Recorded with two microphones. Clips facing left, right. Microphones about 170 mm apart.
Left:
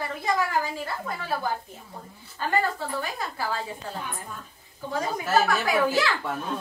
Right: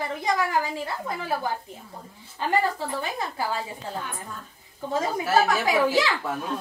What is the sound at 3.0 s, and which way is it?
Speech, 20° right (ahead or behind).